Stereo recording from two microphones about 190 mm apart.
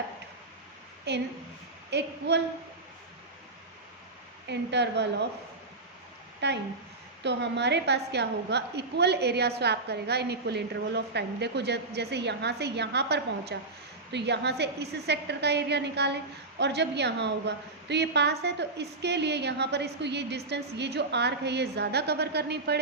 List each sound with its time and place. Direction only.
1.1 s a woman's voice: 60° right (ahead or behind)
4.4 s a woman's voice: 65° right (ahead or behind)
6.4 s a woman's voice: 65° right (ahead or behind)